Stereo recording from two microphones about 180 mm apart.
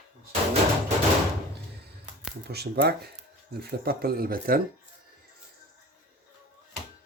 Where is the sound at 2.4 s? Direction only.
65° right (ahead or behind).